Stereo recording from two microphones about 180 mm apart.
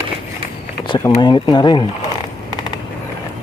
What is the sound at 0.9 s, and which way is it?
Speech, 25° left (ahead or behind).